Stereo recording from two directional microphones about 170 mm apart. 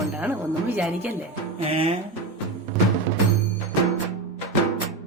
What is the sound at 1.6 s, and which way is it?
Speech, 30° right (ahead or behind).